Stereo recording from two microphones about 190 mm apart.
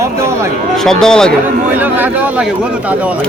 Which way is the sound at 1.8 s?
10° right (ahead or behind).